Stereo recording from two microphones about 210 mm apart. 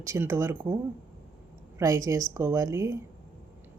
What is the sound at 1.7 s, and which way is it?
Speech, 15° right (ahead or behind).